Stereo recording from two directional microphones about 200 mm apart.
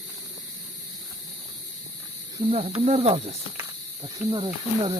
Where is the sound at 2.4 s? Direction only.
30° right (ahead or behind).